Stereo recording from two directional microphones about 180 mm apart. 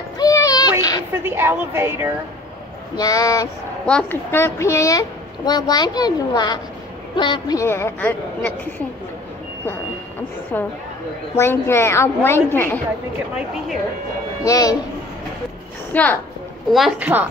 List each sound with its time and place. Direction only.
0.2 s a sound: 20° left (ahead or behind)
1.2 s speech: 10° right (ahead or behind)
3.0 s a woman's voice: 20° left (ahead or behind)
3.8 s a woman's voice: 10° left (ahead or behind)
10.5 s a woman's voice: 10° left (ahead or behind)
14.4 s a woman's voice: 20° left (ahead or behind)
15.9 s a woman's voice: 10° left (ahead or behind)
16.7 s a woman's voice: 5° right (ahead or behind)